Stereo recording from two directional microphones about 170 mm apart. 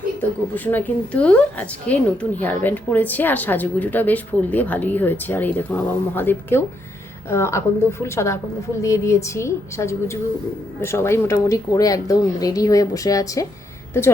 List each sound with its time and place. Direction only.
0.2 s a woman's voice: 10° left (ahead or behind)